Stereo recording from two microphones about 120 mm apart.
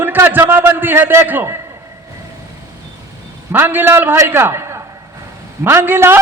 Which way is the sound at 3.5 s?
15° right (ahead or behind).